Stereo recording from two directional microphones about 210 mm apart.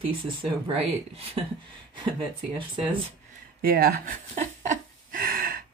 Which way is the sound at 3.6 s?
45° right (ahead or behind).